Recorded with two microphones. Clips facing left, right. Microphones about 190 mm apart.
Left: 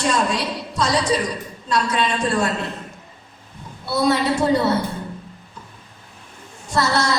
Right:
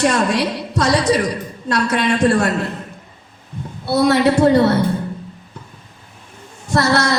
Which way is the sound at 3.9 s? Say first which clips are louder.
Right 5 dB; 65° right (ahead or behind).